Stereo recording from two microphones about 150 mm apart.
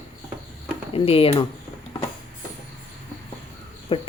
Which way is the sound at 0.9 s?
40° left (ahead or behind).